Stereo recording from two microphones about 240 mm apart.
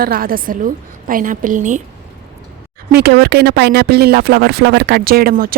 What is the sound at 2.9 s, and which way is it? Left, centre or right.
Speech, right.